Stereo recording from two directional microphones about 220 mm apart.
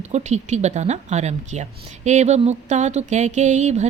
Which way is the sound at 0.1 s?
30° right (ahead or behind).